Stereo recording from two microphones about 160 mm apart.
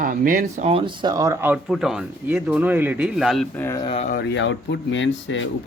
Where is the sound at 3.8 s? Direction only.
40° left (ahead or behind).